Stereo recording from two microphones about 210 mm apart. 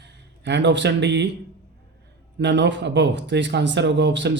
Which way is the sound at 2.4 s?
55° right (ahead or behind).